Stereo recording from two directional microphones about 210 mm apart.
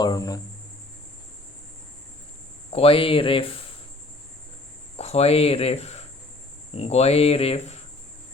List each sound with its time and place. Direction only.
0.0 s cricket: 15° left (ahead or behind)
2.7 s speech: 25° left (ahead or behind)
4.9 s speech: 30° left (ahead or behind)